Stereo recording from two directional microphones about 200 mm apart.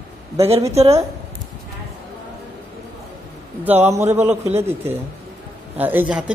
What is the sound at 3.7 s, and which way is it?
Speech, 10° right (ahead or behind).